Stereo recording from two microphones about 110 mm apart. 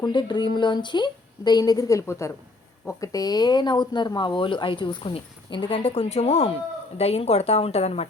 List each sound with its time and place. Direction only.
0.0 s a woman's voice: 45° left (ahead or behind); by 8.0 s 75° left (ahead or behind)